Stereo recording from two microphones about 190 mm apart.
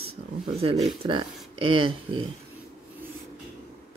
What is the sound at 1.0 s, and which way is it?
Speech, 25° right (ahead or behind).